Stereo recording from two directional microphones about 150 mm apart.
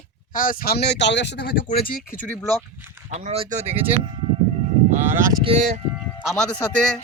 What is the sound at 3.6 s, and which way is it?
Speech, 10° right (ahead or behind).